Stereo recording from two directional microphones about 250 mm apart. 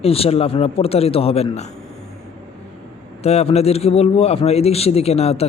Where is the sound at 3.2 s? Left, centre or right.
Left.